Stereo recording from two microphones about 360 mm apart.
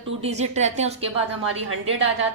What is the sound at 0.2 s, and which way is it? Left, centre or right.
Speech, centre.